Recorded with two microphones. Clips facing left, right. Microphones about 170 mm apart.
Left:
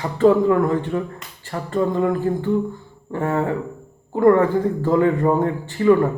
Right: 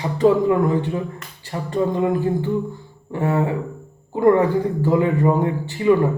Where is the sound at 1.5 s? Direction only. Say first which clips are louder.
Even; 20° right (ahead or behind).